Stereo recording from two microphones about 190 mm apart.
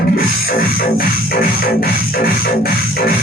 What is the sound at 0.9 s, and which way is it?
Music, 50° left (ahead or behind).